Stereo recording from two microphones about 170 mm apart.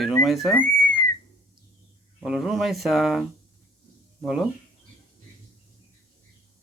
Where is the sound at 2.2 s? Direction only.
Centre (ahead or behind).